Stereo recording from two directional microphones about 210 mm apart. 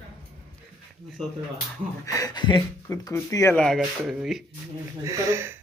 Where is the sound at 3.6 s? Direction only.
Centre (ahead or behind).